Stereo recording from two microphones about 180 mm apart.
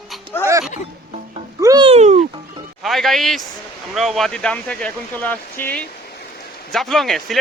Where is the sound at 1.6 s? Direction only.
20° right (ahead or behind).